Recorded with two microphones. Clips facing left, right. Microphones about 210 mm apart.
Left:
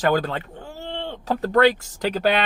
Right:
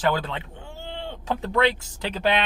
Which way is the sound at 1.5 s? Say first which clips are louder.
Left 6 dB; 40° left (ahead or behind).